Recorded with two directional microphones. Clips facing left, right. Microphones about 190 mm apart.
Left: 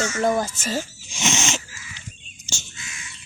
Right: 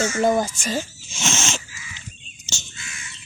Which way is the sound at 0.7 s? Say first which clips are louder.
Right 1 dB; 15° left (ahead or behind).